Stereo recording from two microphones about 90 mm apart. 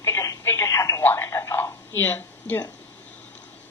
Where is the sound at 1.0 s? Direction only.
25° left (ahead or behind).